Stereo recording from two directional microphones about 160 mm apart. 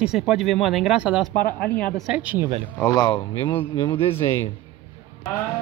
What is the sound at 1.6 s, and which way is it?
Speech, 10° left (ahead or behind).